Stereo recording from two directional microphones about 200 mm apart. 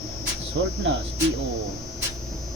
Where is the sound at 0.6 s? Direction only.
60° right (ahead or behind).